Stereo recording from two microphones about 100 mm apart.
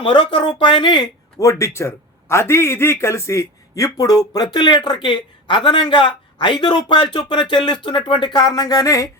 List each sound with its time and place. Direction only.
0.0 s a man's voice: 55° left (ahead or behind)
1.4 s a man's voice: 30° left (ahead or behind)